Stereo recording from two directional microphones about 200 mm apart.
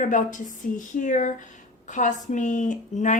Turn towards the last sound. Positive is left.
turn(degrees=40)  # may be behind; listen again after turning